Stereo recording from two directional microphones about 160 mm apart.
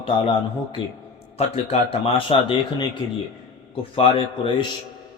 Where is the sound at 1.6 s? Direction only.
35° left (ahead or behind).